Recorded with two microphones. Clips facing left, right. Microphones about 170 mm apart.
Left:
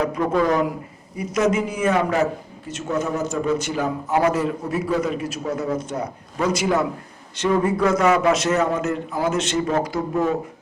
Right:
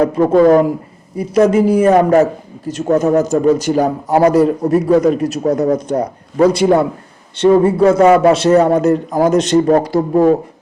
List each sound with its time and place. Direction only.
0.2 s a man's voice: 35° right (ahead or behind)